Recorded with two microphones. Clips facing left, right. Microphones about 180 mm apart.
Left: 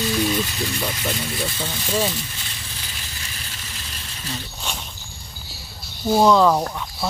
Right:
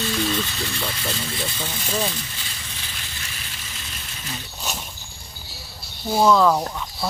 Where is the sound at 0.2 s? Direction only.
15° left (ahead or behind).